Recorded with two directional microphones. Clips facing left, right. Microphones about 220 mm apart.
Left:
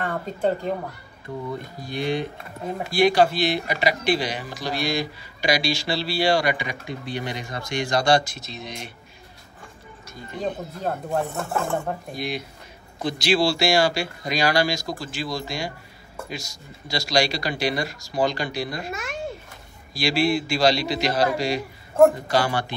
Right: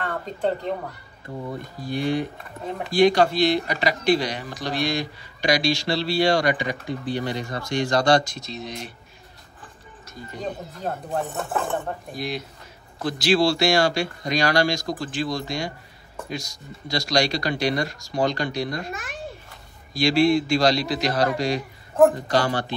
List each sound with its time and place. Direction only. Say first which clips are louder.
0.1 s speech: left 1 dB; 5° left (ahead or behind)
1.9 s speech: right 2 dB; 20° left (ahead or behind)
2.7 s speech: right 2 dB; 5° left (ahead or behind)
11.1 s speech: left 2 dB; centre (ahead or behind)
19.9 s speech: right 3 dB; 5° left (ahead or behind)